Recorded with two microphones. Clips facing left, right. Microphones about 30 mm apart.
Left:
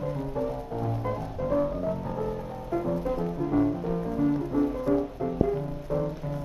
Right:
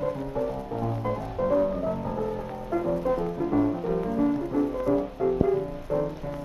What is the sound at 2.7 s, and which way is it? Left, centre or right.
Music, centre.